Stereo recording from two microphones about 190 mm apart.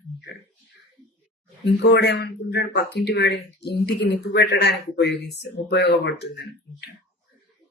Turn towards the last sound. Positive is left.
turn(degrees=60)  # may be behind; listen again after turning